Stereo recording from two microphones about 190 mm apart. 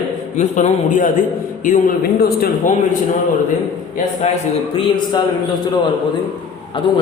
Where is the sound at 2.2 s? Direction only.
50° left (ahead or behind).